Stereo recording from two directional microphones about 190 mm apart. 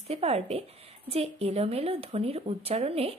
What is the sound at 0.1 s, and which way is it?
A woman's voice, 30° right (ahead or behind).